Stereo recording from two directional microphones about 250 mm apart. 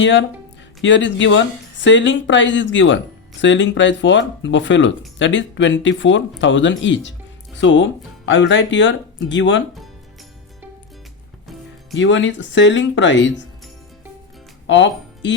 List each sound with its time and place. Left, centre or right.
0.0 s speech: left
11.9 s speech: left
14.7 s speech: left